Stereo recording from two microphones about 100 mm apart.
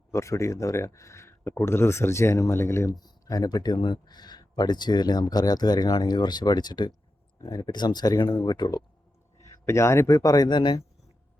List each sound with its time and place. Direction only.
0.1 s speech: 30° left (ahead or behind)
3.0 s speech: 40° left (ahead or behind)
7.4 s speech: 30° left (ahead or behind)
7.7 s speech: 45° left (ahead or behind)
9.4 s a man's voice: 30° left (ahead or behind); by 10.8 s 50° left (ahead or behind)